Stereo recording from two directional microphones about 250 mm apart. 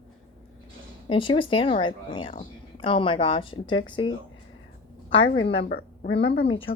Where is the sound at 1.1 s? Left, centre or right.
Centre.